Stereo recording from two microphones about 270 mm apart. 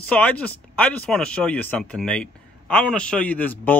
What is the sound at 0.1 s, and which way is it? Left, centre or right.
A man's voice, centre.